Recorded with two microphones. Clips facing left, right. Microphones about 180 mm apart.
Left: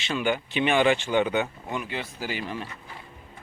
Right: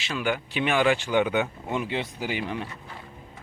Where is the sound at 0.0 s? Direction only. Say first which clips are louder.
Left 2 dB; centre (ahead or behind).